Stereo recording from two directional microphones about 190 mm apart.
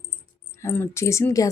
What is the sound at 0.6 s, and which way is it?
Speech, 15° left (ahead or behind).